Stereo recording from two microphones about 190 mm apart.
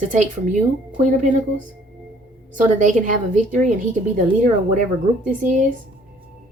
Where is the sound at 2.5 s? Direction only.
40° right (ahead or behind).